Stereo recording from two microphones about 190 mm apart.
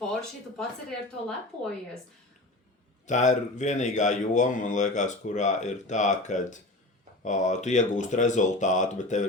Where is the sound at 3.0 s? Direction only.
40° left (ahead or behind).